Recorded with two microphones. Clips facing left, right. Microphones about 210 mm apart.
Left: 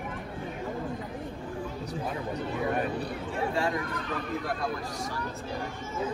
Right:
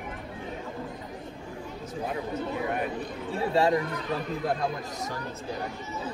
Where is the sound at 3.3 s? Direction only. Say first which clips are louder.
Right 5 dB; 30° right (ahead or behind).